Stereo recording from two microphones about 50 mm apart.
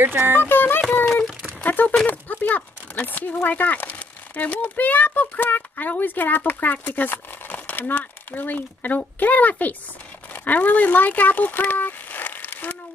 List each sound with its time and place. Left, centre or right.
0.0 s speech: right
0.4 s speech: left
1.6 s a child's voice: left